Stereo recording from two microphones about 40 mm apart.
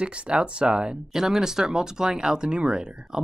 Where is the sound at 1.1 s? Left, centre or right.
Centre.